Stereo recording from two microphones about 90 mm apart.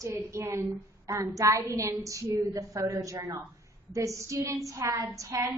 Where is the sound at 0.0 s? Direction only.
35° right (ahead or behind).